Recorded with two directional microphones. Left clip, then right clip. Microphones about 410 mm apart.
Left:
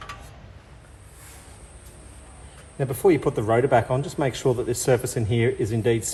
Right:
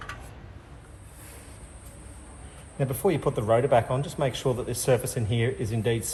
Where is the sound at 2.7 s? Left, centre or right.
Left.